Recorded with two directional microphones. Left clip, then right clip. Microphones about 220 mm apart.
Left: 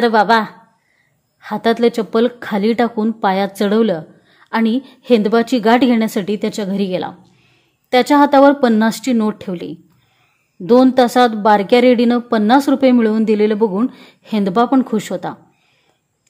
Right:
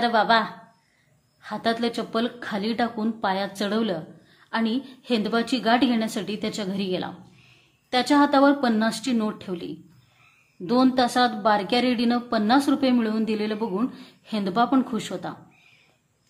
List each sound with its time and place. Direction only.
0.0 s speech: 35° left (ahead or behind)